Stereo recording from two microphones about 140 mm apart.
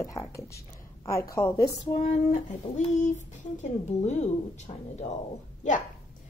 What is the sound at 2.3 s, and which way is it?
Speech, 60° left (ahead or behind).